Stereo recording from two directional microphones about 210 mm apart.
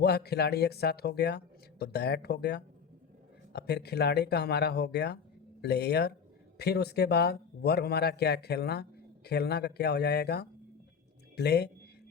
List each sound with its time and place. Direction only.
0.0 s a man's voice: 50° left (ahead or behind)